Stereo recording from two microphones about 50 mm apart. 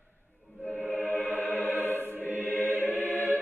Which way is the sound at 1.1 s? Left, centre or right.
Left.